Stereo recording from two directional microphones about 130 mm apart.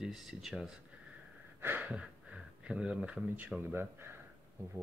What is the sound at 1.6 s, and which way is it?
Speech, 15° right (ahead or behind).